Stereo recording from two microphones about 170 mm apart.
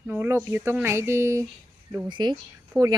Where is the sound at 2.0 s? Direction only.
25° right (ahead or behind).